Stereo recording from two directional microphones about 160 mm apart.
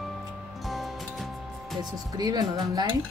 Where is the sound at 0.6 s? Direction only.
Centre (ahead or behind).